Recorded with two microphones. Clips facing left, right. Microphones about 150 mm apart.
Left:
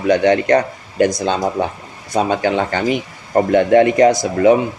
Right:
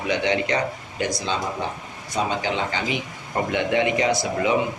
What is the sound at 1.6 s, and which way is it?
Speech, 55° left (ahead or behind).